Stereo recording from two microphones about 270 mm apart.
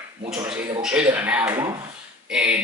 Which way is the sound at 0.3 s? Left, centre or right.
Centre.